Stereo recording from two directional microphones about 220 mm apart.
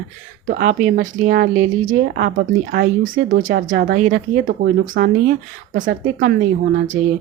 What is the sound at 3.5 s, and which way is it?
Speech, 45° right (ahead or behind).